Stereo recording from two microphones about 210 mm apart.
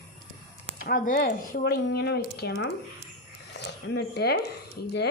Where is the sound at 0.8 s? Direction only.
40° left (ahead or behind).